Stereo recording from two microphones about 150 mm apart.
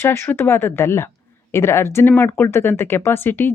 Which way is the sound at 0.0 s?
15° left (ahead or behind).